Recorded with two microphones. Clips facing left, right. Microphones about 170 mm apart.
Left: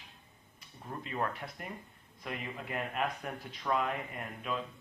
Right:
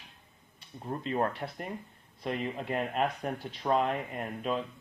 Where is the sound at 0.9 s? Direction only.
35° right (ahead or behind).